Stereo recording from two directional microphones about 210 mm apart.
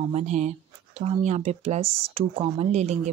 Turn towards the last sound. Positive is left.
turn(degrees=-30)  # may be behind; listen again after turning